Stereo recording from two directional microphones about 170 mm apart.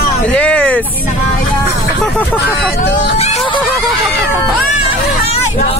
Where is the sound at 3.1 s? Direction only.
40° left (ahead or behind).